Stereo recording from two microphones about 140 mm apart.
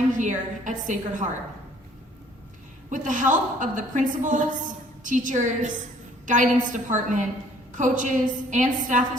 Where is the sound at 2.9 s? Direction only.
65° right (ahead or behind).